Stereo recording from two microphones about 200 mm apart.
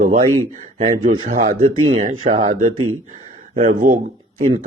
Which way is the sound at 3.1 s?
40° right (ahead or behind).